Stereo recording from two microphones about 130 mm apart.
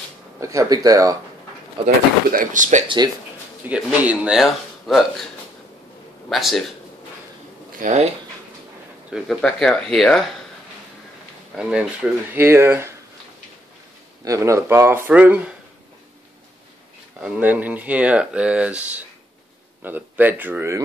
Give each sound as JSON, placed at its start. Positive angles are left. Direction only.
{"t": 0.4, "sound": "speech", "side_deg": -25}
{"t": 1.8, "sound": "speech", "side_deg": -45}
{"t": 2.3, "sound": "speech", "side_deg": -75}
{"t": 3.6, "sound": "speech", "side_deg": -10}
{"t": 6.2, "sound": "a man's voice", "side_deg": 0}
{"t": 7.8, "sound": "speech", "side_deg": -60}
{"t": 9.4, "sound": "speech", "side_deg": 5}
{"t": 11.5, "sound": "speech", "side_deg": -5}
{"t": 12.4, "sound": "speech", "side_deg": -20}
{"t": 14.2, "sound": "speech", "side_deg": -25}
{"t": 17.2, "sound": "speech", "side_deg": -10}